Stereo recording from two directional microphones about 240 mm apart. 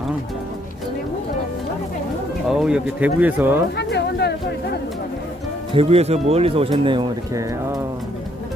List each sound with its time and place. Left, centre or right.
2.4 s speech: centre
3.7 s a sound: left
5.8 s speech: right